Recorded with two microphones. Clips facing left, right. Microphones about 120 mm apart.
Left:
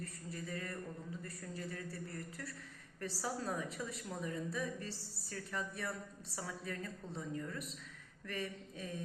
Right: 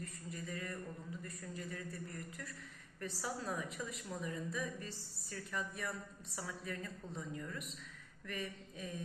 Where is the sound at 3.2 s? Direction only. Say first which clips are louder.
Left 2 dB; 35° left (ahead or behind).